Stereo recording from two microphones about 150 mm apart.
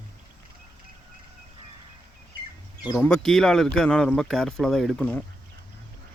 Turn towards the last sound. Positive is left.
turn(degrees=10)  # may be behind; listen again after turning